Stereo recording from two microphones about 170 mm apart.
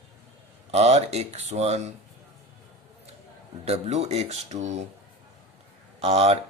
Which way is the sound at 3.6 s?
40° right (ahead or behind).